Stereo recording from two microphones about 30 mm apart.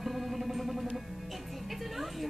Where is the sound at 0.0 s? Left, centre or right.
Centre.